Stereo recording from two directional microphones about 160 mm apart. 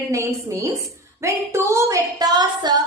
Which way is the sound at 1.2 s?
15° right (ahead or behind).